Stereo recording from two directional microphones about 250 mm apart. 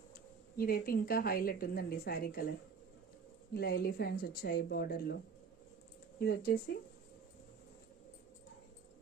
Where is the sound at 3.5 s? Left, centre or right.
Left.